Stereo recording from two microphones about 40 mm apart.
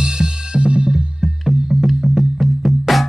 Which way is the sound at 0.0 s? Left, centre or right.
Centre.